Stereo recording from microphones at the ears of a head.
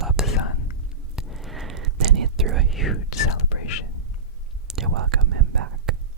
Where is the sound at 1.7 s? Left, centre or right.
Right.